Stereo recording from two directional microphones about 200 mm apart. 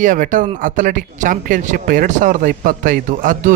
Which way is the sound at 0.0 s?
40° right (ahead or behind).